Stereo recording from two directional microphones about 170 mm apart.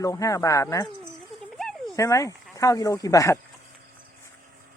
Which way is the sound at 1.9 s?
20° left (ahead or behind).